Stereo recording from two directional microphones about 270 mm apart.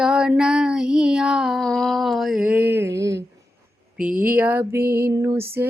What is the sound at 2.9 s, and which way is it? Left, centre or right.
Speech, right.